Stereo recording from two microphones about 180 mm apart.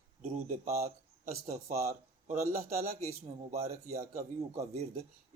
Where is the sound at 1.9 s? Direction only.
40° right (ahead or behind).